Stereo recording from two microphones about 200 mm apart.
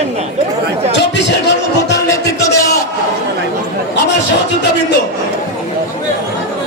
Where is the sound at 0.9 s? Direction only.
60° left (ahead or behind).